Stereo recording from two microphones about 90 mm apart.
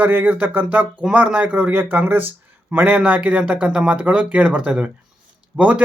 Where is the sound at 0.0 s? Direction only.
20° right (ahead or behind).